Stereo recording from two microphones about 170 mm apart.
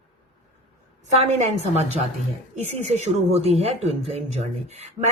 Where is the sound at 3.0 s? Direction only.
35° right (ahead or behind).